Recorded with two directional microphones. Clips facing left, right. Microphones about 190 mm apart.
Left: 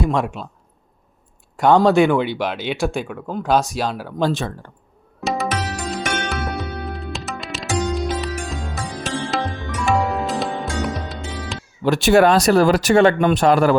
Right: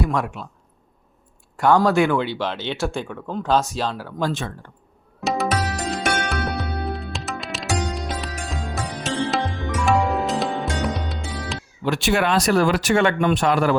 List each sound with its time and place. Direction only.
0.0 s speech: 25° left (ahead or behind)
1.5 s speech: 20° left (ahead or behind)
4.2 s speech: 35° left (ahead or behind)
5.2 s music: centre (ahead or behind)
11.8 s speech: 40° left (ahead or behind)